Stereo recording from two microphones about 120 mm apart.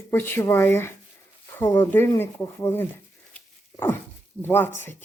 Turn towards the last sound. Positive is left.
turn(degrees=20)  # may be behind; listen again after turning